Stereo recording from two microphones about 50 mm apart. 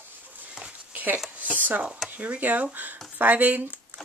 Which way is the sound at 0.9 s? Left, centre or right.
Right.